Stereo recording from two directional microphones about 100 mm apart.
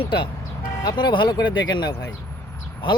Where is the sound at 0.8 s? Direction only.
45° left (ahead or behind).